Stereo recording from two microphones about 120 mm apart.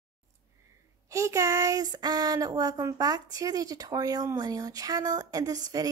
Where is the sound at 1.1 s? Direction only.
25° right (ahead or behind).